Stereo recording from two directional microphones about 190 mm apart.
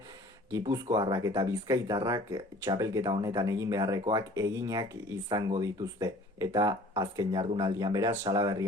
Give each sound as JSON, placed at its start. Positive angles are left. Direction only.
{"t": 0.7, "sound": "speech", "side_deg": -20}